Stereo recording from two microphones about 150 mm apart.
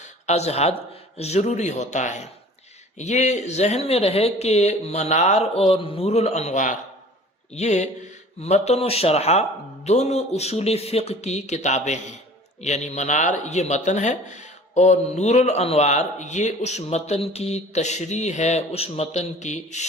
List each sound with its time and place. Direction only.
0.0 s speech: 50° left (ahead or behind)